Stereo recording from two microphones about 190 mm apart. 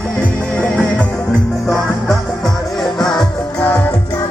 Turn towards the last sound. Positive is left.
turn(degrees=0)  # may be behind; listen again after turning